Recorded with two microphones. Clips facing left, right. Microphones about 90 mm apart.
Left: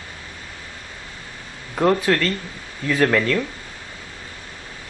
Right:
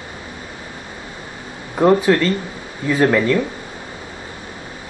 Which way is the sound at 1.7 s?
15° right (ahead or behind).